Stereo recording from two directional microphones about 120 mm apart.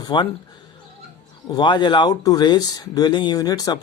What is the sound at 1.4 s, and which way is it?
Speech, 35° left (ahead or behind).